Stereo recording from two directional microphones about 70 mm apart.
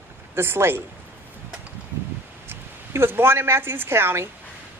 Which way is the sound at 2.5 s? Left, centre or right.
Right.